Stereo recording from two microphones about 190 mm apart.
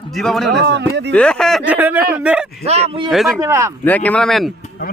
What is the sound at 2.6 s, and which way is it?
Speech, 35° right (ahead or behind).